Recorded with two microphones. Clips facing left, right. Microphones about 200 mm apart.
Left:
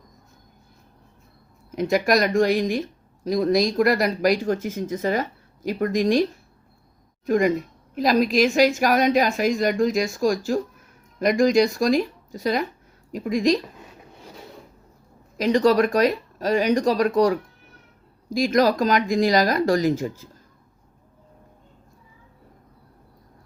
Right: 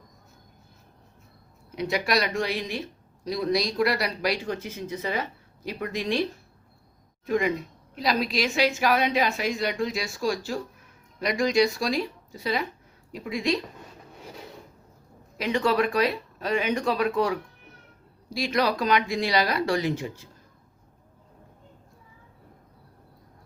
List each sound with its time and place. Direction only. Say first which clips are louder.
1.7 s speech: left 6 dB; 45° left (ahead or behind)
7.3 s speech: left 5 dB; 45° left (ahead or behind)
15.4 s speech: left 6 dB; 40° left (ahead or behind)